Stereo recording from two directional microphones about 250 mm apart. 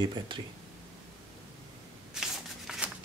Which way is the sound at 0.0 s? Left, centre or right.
Centre.